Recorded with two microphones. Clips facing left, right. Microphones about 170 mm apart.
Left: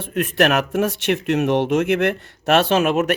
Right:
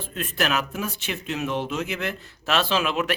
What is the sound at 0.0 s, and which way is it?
Speech, 60° left (ahead or behind).